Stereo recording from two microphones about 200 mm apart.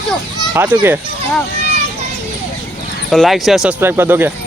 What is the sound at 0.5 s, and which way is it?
Speech, 10° right (ahead or behind).